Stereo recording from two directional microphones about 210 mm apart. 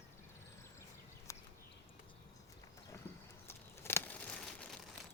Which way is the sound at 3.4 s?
10° left (ahead or behind).